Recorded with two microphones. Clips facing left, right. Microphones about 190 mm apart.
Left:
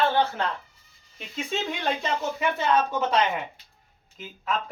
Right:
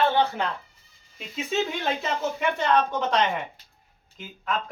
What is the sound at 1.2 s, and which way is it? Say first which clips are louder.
Speech: right 3 dB; centre (ahead or behind).